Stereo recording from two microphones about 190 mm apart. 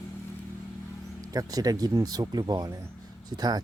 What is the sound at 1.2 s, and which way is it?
Speech, 20° right (ahead or behind).